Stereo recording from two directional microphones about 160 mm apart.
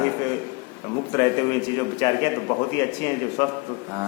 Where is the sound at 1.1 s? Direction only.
25° left (ahead or behind).